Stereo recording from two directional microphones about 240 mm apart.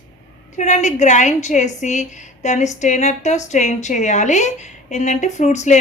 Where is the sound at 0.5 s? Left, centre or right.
Left.